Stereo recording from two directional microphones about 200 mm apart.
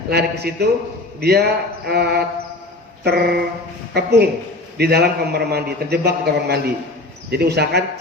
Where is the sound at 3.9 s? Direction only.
55° right (ahead or behind).